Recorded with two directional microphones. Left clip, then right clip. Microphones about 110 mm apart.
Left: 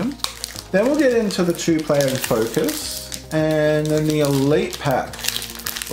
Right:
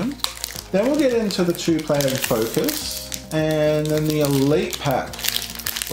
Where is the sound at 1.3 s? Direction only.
20° left (ahead or behind).